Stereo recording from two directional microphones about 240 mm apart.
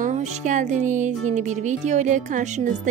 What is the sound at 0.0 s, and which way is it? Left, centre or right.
Speech, right.